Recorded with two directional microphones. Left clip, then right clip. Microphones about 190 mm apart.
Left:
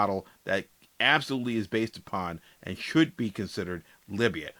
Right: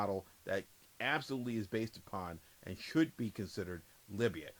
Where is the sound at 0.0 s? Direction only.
20° left (ahead or behind).